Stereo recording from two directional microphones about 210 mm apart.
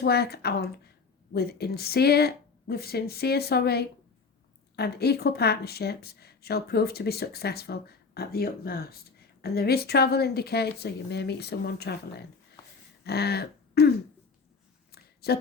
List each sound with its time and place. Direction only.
0.0 s speech: 50° left (ahead or behind)
13.1 s throat clearing: 50° left (ahead or behind)
14.9 s a sound: 50° left (ahead or behind)